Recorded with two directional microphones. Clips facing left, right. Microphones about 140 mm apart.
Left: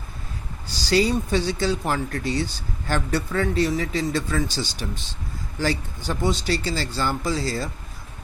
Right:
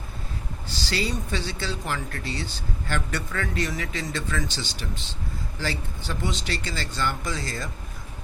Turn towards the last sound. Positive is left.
turn(degrees=30)  # may be behind; listen again after turning